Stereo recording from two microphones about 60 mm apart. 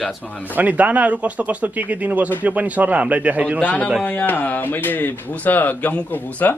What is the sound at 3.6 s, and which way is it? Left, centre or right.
Speech, left.